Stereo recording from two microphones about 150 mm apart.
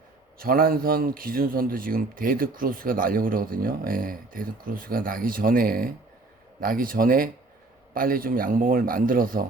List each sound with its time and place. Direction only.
0.3 s speech: 75° right (ahead or behind)